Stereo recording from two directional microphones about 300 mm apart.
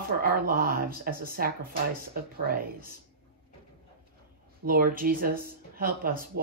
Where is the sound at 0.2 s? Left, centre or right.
Right.